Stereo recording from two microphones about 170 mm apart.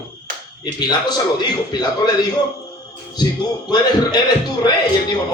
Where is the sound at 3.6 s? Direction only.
25° left (ahead or behind).